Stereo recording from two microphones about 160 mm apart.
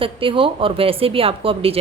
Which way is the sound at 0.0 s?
35° right (ahead or behind).